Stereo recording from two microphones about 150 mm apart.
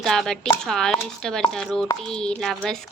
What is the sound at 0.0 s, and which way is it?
Speech, centre (ahead or behind).